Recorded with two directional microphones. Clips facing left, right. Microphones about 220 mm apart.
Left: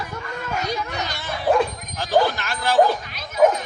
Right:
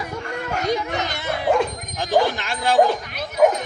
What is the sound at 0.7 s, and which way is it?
Bow-wow, 20° right (ahead or behind).